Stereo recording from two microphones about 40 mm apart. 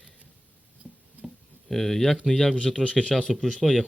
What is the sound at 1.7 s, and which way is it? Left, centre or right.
Speech, centre.